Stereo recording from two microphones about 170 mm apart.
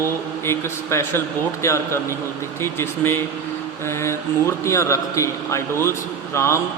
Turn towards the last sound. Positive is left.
turn(degrees=15)  # may be behind; listen again after turning